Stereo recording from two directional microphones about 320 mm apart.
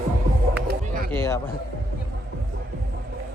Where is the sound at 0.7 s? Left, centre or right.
Right.